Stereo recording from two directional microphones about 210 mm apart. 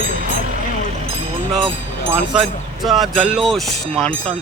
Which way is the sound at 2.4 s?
Centre (ahead or behind).